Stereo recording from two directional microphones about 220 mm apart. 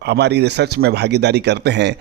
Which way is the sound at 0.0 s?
50° right (ahead or behind).